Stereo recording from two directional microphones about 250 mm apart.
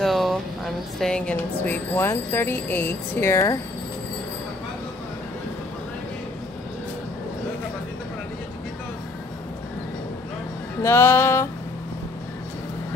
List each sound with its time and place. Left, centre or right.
0.0 s speech: centre
10.8 s music: centre